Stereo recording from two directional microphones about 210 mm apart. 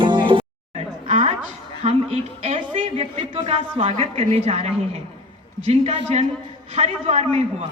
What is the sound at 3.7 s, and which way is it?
A woman's voice, 30° right (ahead or behind).